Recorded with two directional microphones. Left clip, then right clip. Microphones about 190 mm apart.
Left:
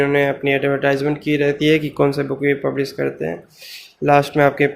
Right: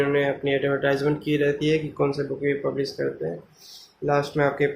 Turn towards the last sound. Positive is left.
turn(degrees=40)  # may be behind; listen again after turning